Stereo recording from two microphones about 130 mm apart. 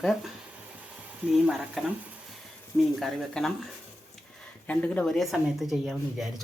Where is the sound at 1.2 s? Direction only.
5° right (ahead or behind).